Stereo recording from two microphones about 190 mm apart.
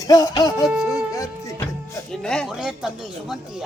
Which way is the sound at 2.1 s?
5° left (ahead or behind).